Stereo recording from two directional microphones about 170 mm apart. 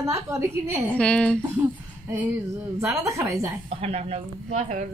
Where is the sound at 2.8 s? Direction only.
20° right (ahead or behind).